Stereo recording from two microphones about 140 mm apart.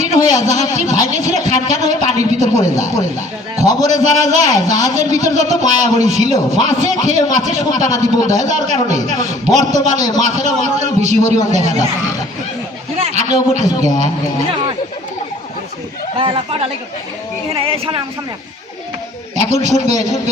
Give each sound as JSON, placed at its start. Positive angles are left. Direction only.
{"t": 0.0, "sound": "a man's voice", "side_deg": -55}
{"t": 13.0, "sound": "a man's voice", "side_deg": -50}
{"t": 16.1, "sound": "speech", "side_deg": -40}
{"t": 19.5, "sound": "a man's voice", "side_deg": -55}